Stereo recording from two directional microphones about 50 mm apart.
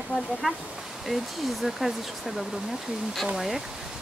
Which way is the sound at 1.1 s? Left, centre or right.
Centre.